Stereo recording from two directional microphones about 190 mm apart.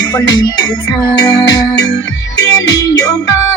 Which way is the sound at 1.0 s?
20° left (ahead or behind).